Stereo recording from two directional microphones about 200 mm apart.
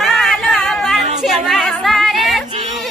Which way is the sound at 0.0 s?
Centre (ahead or behind).